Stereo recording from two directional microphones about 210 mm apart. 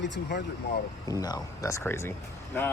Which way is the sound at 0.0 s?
55° left (ahead or behind).